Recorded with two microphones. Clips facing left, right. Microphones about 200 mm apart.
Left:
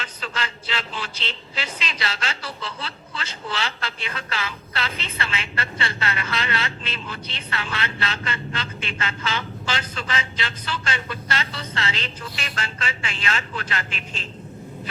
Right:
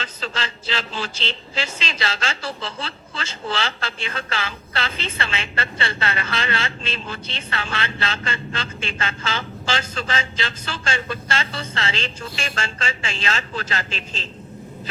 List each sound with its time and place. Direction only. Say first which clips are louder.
0.0 s a man's voice: right 2 dB; 25° right (ahead or behind)